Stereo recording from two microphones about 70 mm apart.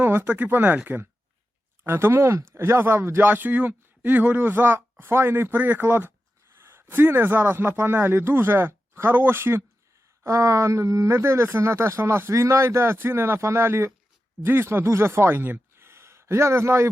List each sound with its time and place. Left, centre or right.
0.0 s speech: right
1.9 s speech: right
10.2 s speech: right